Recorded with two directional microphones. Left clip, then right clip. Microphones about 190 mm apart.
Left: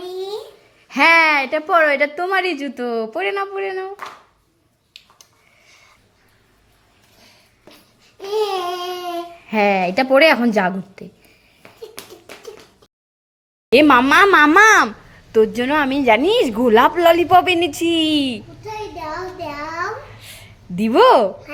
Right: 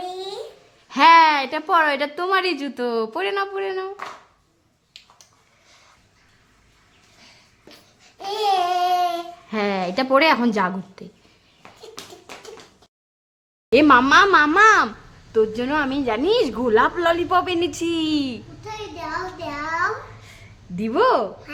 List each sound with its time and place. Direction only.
0.9 s a woman's voice: 10° left (ahead or behind)
8.2 s child singing: 25° right (ahead or behind)
9.5 s a woman's voice: 10° left (ahead or behind)
13.7 s a woman's voice: 5° left (ahead or behind)
14.1 s a woman's voice: 15° left (ahead or behind)
14.5 s a woman's voice: 25° left (ahead or behind)
15.3 s a woman's voice: 15° left (ahead or behind)
20.7 s a woman's voice: 15° left (ahead or behind)